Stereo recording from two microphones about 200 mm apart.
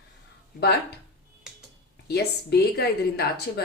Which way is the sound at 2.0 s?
55° left (ahead or behind).